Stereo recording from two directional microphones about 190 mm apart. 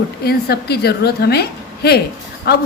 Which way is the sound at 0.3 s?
55° left (ahead or behind).